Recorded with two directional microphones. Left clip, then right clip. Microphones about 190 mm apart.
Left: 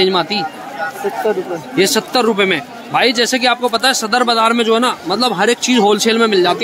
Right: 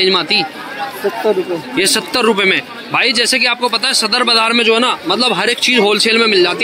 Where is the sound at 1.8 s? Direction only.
5° left (ahead or behind).